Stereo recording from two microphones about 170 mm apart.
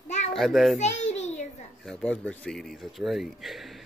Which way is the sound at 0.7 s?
45° left (ahead or behind).